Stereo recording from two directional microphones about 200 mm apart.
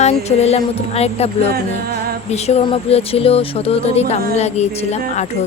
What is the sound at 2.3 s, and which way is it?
Speech, 30° left (ahead or behind).